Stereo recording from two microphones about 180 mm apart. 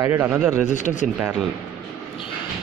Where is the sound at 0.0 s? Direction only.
15° right (ahead or behind).